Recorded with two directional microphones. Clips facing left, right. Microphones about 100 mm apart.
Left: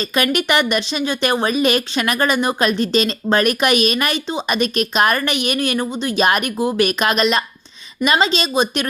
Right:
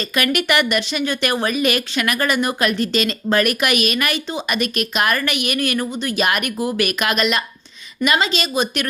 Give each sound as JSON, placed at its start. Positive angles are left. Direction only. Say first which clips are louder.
{"t": 0.0, "sound": "speech", "louder": "left 2 dB", "side_deg": 25}